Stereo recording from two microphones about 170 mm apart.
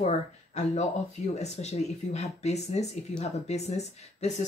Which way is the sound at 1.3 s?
40° left (ahead or behind).